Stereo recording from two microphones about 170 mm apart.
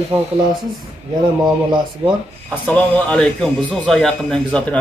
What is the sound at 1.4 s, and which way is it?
Speech, 25° right (ahead or behind).